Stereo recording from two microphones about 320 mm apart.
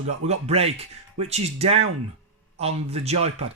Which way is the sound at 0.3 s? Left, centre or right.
Centre.